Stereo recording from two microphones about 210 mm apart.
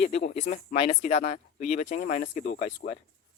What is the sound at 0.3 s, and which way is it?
Speech, 35° left (ahead or behind).